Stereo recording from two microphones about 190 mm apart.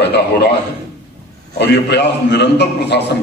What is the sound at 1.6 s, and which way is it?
A man's voice, 60° left (ahead or behind).